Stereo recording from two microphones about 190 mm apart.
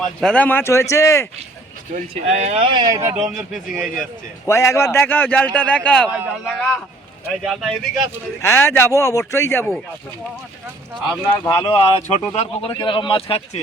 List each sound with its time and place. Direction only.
0.0 s speech: 5° left (ahead or behind)
1.9 s speech: 35° right (ahead or behind)
2.7 s speech: 20° right (ahead or behind)
3.2 s speech: centre (ahead or behind)
4.4 s speech: 15° left (ahead or behind)
6.1 s speech: 5° right (ahead or behind)
8.4 s speech: 15° left (ahead or behind)
11.4 s speech: 20° left (ahead or behind)